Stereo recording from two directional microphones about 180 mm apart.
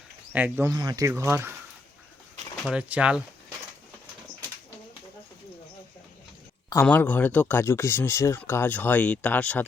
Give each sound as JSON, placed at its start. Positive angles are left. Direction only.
{"t": 0.3, "sound": "speech", "side_deg": -10}
{"t": 0.7, "sound": "speech", "side_deg": -20}
{"t": 2.6, "sound": "speech", "side_deg": -5}
{"t": 6.8, "sound": "speech", "side_deg": 10}